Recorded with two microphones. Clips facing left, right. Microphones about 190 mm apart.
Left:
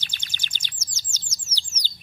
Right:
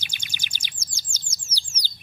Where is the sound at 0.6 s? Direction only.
10° right (ahead or behind).